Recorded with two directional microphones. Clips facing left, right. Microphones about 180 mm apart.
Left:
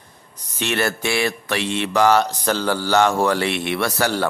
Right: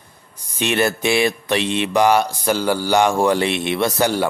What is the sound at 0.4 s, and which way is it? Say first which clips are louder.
Speech: right 3 dB; 15° right (ahead or behind).